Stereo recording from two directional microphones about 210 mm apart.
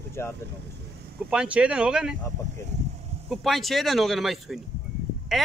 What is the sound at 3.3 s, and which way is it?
Speech, centre (ahead or behind).